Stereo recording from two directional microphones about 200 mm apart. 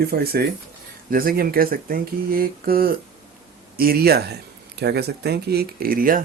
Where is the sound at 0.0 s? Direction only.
50° right (ahead or behind).